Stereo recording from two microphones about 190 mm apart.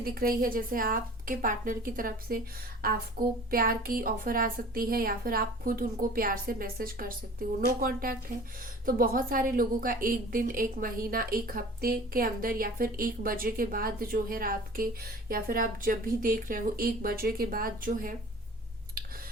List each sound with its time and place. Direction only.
0.0 s a woman's voice: 50° right (ahead or behind)